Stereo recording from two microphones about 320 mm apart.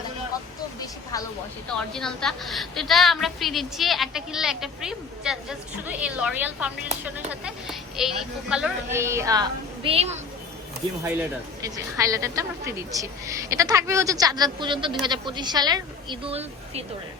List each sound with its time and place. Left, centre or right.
1.1 s a woman's voice: centre
11.6 s a woman's voice: centre